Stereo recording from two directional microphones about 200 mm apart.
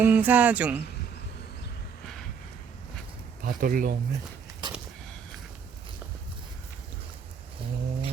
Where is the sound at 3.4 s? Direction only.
45° right (ahead or behind).